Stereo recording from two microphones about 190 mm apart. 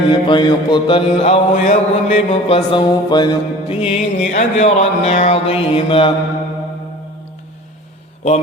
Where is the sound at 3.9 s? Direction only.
35° left (ahead or behind).